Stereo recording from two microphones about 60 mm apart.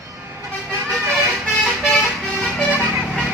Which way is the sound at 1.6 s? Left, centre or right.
Centre.